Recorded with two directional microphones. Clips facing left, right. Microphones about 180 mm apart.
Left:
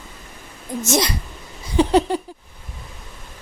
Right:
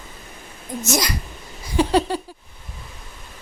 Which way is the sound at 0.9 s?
25° left (ahead or behind).